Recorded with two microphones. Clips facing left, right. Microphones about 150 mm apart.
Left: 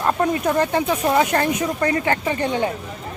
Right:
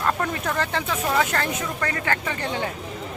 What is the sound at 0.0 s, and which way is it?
Speech, 20° left (ahead or behind).